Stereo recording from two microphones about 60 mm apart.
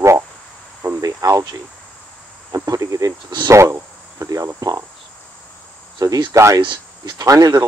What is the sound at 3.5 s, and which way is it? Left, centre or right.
Insect, right.